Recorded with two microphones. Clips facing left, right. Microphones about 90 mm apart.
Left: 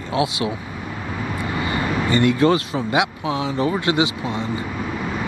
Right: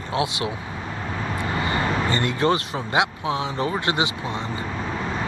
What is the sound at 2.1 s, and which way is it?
Speech, 25° right (ahead or behind).